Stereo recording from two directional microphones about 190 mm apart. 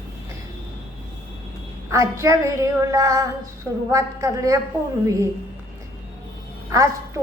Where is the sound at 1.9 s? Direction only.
15° right (ahead or behind).